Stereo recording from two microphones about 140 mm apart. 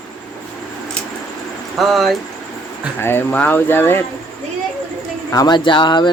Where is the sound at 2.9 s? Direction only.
15° left (ahead or behind).